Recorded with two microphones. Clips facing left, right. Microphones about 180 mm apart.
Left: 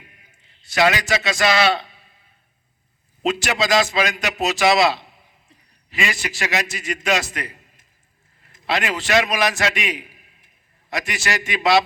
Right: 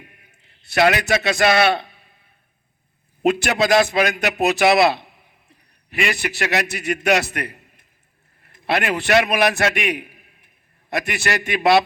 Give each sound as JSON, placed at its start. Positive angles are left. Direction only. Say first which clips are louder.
{"t": 0.3, "sound": "a man's voice", "louder": "right 1 dB", "side_deg": -60}
{"t": 3.2, "sound": "a man's voice", "louder": "right 3 dB", "side_deg": -55}